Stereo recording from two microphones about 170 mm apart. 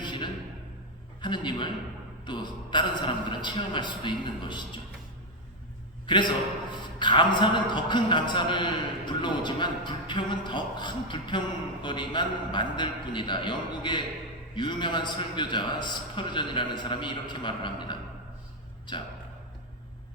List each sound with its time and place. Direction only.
0.0 s music: 25° left (ahead or behind)
1.2 s a man's voice: 25° left (ahead or behind)
6.1 s a man's voice: 25° left (ahead or behind)